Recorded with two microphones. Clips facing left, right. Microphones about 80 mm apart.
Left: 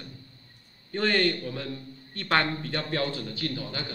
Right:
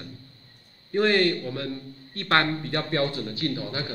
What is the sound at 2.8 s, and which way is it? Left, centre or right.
A man's voice, centre.